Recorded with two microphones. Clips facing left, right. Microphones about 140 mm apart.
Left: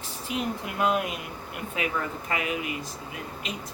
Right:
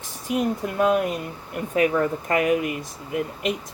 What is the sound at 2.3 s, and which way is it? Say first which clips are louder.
Speech: right 9 dB; 50° right (ahead or behind).